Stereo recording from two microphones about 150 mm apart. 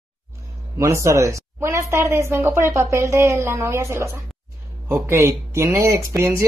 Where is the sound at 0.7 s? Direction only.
20° right (ahead or behind).